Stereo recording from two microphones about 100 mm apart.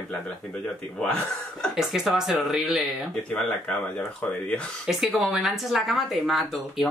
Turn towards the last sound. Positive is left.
turn(degrees=0)  # may be behind; listen again after turning